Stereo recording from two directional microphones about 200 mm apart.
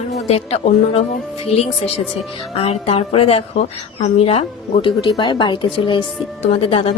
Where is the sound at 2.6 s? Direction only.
30° left (ahead or behind).